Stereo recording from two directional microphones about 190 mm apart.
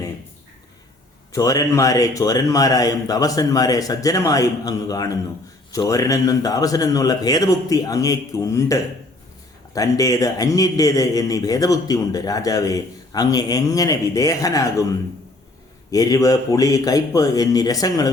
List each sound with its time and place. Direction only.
1.3 s a man's voice: 15° left (ahead or behind)
15.9 s a man's voice: 20° left (ahead or behind)